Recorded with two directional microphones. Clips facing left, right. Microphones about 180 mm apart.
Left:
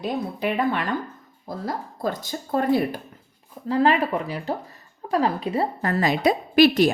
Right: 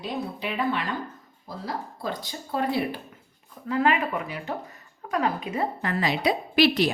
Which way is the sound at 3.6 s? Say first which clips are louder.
Left 4 dB; 35° left (ahead or behind).